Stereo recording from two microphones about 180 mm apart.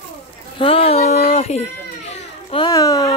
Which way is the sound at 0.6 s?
30° left (ahead or behind).